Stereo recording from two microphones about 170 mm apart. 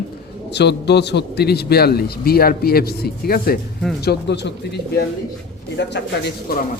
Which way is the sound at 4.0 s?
80° left.